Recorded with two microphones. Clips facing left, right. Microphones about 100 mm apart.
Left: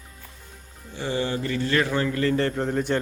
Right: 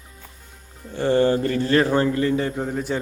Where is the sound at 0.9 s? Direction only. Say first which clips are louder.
Right 9 dB; 50° right (ahead or behind); by 2.1 s 35° right (ahead or behind).